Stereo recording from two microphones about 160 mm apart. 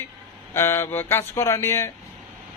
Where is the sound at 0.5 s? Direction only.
15° left (ahead or behind).